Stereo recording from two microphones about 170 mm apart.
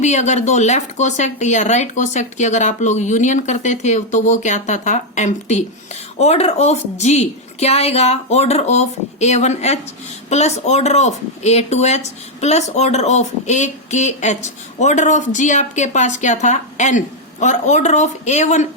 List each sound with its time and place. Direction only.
0.0 s a woman's voice: 45° left (ahead or behind)